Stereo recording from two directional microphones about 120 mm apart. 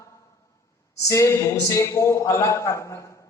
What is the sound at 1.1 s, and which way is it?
A man's voice, 25° left (ahead or behind).